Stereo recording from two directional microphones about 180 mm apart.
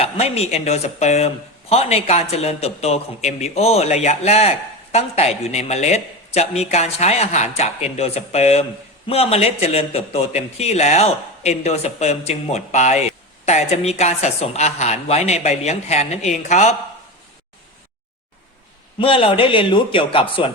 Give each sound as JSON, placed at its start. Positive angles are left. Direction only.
{"t": 0.0, "sound": "a man's voice", "side_deg": 35}
{"t": 18.9, "sound": "a man's voice", "side_deg": 30}